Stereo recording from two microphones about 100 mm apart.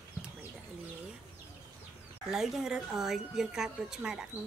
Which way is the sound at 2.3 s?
5° right (ahead or behind).